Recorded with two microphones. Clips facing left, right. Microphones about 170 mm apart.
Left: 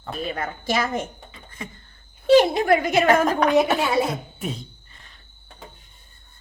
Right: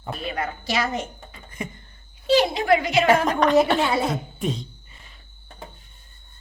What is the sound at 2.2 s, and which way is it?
A woman's voice, 50° left (ahead or behind).